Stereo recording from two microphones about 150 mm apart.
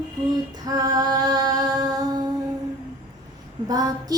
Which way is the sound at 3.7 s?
25° right (ahead or behind).